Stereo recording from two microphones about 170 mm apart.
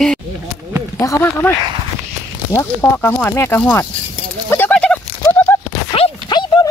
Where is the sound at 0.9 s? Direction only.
20° left (ahead or behind).